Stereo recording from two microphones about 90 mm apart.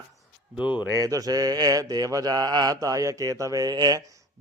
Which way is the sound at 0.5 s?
15° right (ahead or behind).